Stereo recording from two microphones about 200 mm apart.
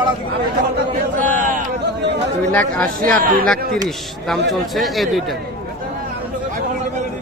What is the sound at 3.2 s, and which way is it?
Speech, 45° right (ahead or behind).